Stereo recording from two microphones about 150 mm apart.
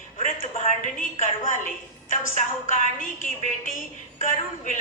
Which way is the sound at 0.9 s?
60° left (ahead or behind).